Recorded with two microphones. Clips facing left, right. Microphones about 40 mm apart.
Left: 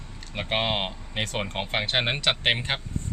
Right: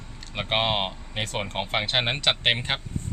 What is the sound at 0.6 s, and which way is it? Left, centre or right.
Speech, centre.